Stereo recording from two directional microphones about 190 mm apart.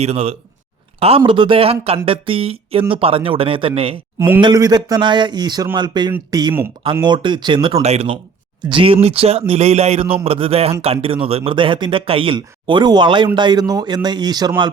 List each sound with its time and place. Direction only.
0.0 s speech: 35° right (ahead or behind)